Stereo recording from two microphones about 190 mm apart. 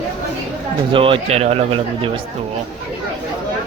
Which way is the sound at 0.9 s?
30° right (ahead or behind).